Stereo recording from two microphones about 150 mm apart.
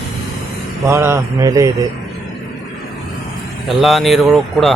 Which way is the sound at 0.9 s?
15° right (ahead or behind).